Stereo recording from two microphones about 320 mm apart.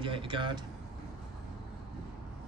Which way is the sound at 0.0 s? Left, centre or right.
Centre.